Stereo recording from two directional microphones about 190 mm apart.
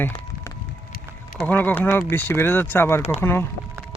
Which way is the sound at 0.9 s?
50° left (ahead or behind).